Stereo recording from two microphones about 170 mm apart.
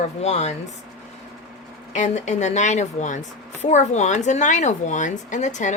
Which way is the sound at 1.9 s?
45° left (ahead or behind).